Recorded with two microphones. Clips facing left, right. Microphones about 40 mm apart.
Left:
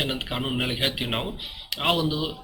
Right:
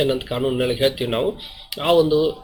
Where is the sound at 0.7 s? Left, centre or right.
Centre.